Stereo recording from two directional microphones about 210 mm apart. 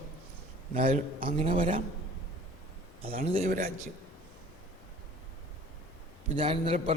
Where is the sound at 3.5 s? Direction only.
45° right (ahead or behind).